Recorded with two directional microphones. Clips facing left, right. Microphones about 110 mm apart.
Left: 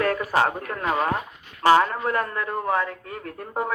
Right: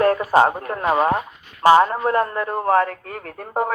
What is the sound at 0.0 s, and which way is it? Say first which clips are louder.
A man's voice: right 6 dB; 30° right (ahead or behind).